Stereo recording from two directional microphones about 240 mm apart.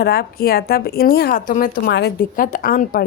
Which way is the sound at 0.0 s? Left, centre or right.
Left.